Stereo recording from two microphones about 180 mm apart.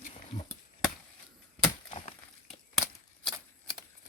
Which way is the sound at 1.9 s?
30° left (ahead or behind).